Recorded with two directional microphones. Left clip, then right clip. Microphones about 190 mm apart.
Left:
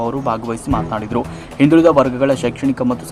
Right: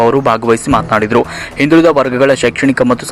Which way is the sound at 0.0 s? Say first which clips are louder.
Right 10 dB; 20° right (ahead or behind).